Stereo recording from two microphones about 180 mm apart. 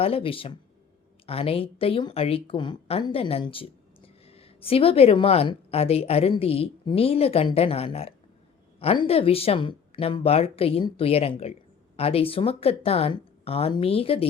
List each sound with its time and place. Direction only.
0.0 s speech: 30° left (ahead or behind)